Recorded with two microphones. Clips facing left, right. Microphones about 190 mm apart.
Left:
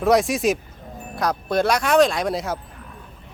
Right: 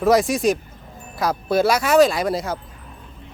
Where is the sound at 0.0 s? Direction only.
Centre (ahead or behind).